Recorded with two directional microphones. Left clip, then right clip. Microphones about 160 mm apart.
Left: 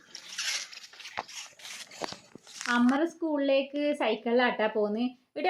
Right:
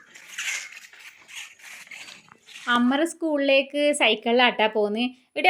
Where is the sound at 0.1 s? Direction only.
10° left (ahead or behind).